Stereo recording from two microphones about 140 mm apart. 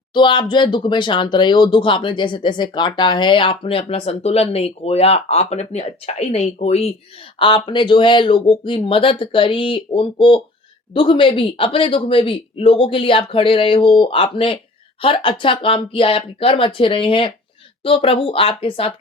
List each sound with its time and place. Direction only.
0.1 s speech: 35° left (ahead or behind); by 6.9 s 50° left (ahead or behind)
7.3 s speech: 40° left (ahead or behind)